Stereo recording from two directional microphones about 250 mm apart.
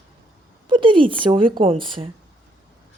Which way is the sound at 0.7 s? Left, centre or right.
Centre.